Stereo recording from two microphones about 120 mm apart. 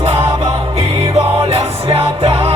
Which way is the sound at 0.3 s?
40° right (ahead or behind).